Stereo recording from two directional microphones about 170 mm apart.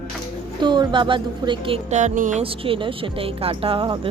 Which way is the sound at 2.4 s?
30° right (ahead or behind).